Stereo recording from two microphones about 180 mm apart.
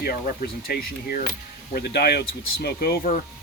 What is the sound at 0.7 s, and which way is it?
Speech, 60° left (ahead or behind).